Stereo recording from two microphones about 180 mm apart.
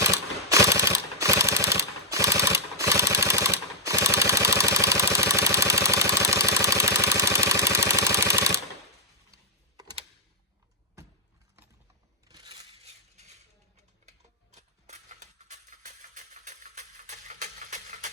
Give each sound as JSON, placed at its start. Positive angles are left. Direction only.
{"t": 0.0, "sound": "mechanisms", "side_deg": -20}
{"t": 12.3, "sound": "crushing", "side_deg": -20}
{"t": 12.8, "sound": "coin", "side_deg": -40}
{"t": 14.5, "sound": "a sound", "side_deg": -40}